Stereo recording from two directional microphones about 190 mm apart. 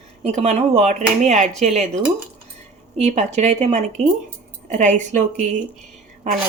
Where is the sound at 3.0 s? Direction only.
35° right (ahead or behind).